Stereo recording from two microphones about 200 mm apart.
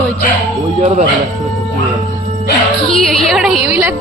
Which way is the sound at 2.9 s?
Centre (ahead or behind).